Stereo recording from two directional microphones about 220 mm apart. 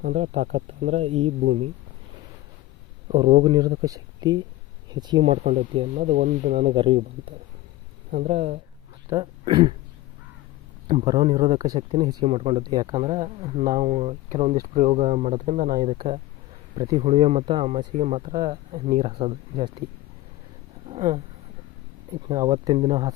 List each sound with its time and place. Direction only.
0.0 s speech: 35° right (ahead or behind)
3.2 s speech: 20° right (ahead or behind)
5.4 s speech: 30° right (ahead or behind)
6.7 s speech: 25° right (ahead or behind)
8.1 s speech: 35° right (ahead or behind)
9.0 s speech: 20° right (ahead or behind)
10.8 s speech: 30° right (ahead or behind)
13.6 s speech: 35° right (ahead or behind)
15.8 s speech: 25° right (ahead or behind)
20.8 s a sound: 30° right (ahead or behind)
22.3 s speech: 20° right (ahead or behind)